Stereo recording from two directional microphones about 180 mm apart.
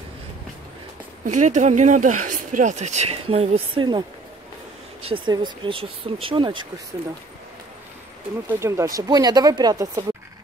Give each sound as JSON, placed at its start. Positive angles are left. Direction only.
{"t": 1.2, "sound": "speech", "side_deg": -45}
{"t": 5.1, "sound": "speech", "side_deg": -25}
{"t": 8.5, "sound": "speech", "side_deg": -15}